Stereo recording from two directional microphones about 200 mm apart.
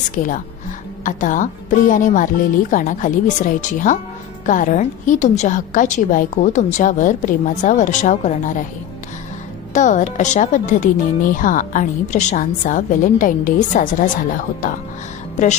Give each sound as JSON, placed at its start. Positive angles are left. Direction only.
{"t": 0.2, "sound": "a woman's voice", "side_deg": 45}
{"t": 9.7, "sound": "speech", "side_deg": 40}